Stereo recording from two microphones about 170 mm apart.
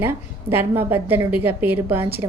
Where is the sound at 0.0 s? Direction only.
15° right (ahead or behind).